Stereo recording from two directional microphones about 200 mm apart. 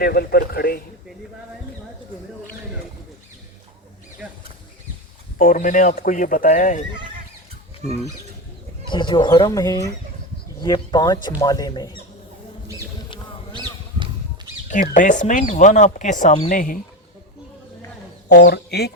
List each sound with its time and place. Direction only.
0.0 s a man's voice: 50° left (ahead or behind)
4.2 s a sound: 5° right (ahead or behind)
5.4 s speech: 40° left (ahead or behind)
8.8 s speech: 25° left (ahead or behind)
14.7 s speech: 40° left (ahead or behind)
18.4 s a man's voice: 50° left (ahead or behind)